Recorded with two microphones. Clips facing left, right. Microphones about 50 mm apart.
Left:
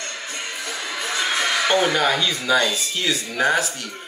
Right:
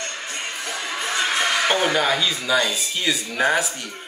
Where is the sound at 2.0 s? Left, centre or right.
Centre.